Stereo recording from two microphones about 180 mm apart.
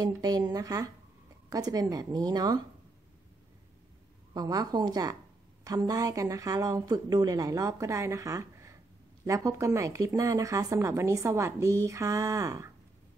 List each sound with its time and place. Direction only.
0.0 s speech: 20° right (ahead or behind)
4.3 s speech: 20° right (ahead or behind)